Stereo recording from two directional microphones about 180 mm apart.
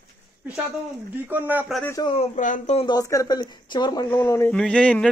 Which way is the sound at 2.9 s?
20° left (ahead or behind).